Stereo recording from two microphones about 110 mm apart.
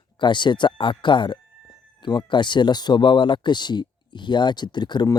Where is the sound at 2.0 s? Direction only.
45° left (ahead or behind).